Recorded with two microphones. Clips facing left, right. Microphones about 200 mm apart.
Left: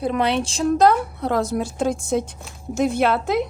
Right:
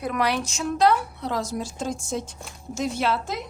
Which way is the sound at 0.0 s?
25° left (ahead or behind).